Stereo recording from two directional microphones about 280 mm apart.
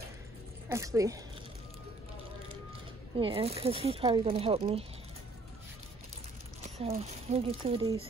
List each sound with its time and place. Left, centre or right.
0.7 s speech: centre
3.2 s speech: centre
6.8 s speech: right